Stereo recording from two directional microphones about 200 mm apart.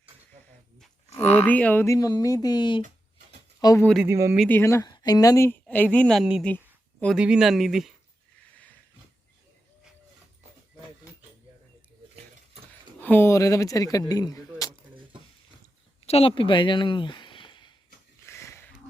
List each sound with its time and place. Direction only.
1.4 s a woman's voice: 10° left (ahead or behind)
4.0 s speech: 15° right (ahead or behind)
4.4 s a woman's voice: 10° left (ahead or behind)
13.0 s speech: 10° left (ahead or behind)
16.0 s speech: 30° left (ahead or behind)
18.3 s dog: 15° left (ahead or behind)